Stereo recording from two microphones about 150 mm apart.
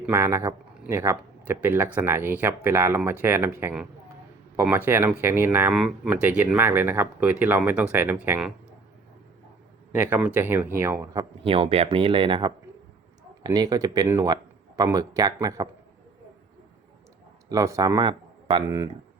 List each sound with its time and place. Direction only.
0.0 s speech: 15° right (ahead or behind)
9.9 s speech: 10° right (ahead or behind)
11.4 s speech: 40° right (ahead or behind); by 15.7 s 25° right (ahead or behind)
17.5 s speech: 20° right (ahead or behind)